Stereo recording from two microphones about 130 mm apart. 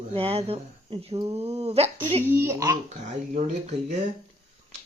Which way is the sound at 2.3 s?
20° right (ahead or behind).